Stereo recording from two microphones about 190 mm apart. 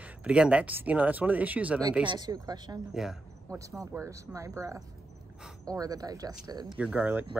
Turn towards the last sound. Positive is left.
turn(degrees=-10)  # may be behind; listen again after turning